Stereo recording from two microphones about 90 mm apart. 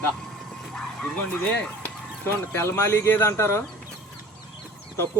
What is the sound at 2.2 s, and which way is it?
Speech, 25° left (ahead or behind).